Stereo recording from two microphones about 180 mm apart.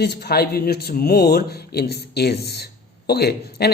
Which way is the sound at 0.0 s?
65° left (ahead or behind).